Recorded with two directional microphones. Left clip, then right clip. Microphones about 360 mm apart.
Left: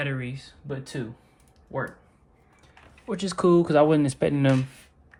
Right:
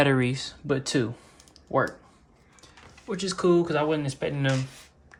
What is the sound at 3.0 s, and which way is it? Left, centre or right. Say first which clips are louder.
Speech: left 1 dB; centre.